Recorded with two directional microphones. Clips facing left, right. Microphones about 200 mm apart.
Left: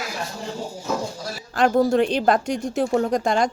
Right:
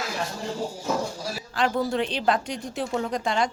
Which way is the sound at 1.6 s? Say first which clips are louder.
Left 7 dB; 45° left (ahead or behind).